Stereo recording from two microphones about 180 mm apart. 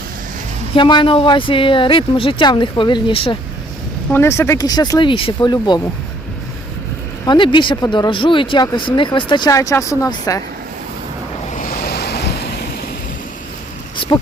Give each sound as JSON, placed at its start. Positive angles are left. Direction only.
{"t": 0.8, "sound": "speech", "side_deg": 25}
{"t": 4.1, "sound": "speech", "side_deg": 15}
{"t": 7.3, "sound": "speech", "side_deg": 25}
{"t": 11.5, "sound": "waves", "side_deg": 50}
{"t": 14.0, "sound": "a sound", "side_deg": 30}